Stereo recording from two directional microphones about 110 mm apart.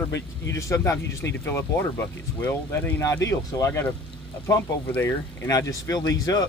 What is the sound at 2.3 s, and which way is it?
Speech, 15° left (ahead or behind).